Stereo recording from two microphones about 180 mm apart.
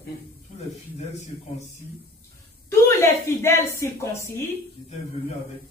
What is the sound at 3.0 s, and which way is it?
Speech, 15° left (ahead or behind).